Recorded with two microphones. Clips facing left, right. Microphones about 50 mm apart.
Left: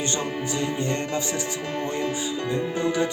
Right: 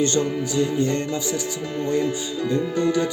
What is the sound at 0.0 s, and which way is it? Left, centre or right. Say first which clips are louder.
Music: right 6 dB; left.